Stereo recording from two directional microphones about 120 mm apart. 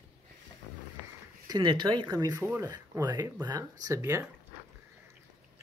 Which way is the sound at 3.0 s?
30° right (ahead or behind).